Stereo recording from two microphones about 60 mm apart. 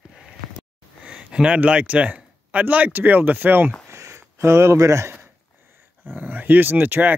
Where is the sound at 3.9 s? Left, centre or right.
Right.